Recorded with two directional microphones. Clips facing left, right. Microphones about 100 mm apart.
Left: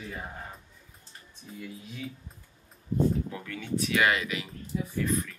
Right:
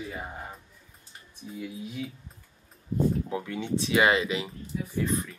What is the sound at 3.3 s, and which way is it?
Speech, 20° right (ahead or behind).